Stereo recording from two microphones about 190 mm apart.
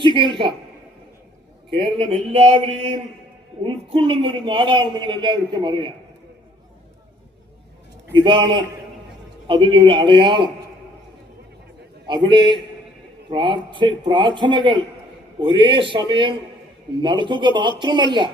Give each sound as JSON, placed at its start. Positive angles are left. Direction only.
{"t": 0.0, "sound": "a woman's voice", "side_deg": -25}
{"t": 1.8, "sound": "a sound", "side_deg": -30}
{"t": 3.6, "sound": "a man's voice", "side_deg": -30}
{"t": 8.1, "sound": "a man's voice", "side_deg": -25}
{"t": 12.0, "sound": "a man's voice", "side_deg": -25}